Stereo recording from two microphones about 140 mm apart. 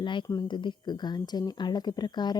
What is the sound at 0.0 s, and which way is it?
Speech, 35° left (ahead or behind).